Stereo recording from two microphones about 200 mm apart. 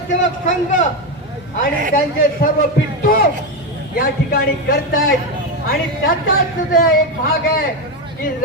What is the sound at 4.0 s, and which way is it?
Speech, 50° left (ahead or behind).